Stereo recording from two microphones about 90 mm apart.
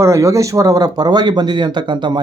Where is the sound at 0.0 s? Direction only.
35° right (ahead or behind).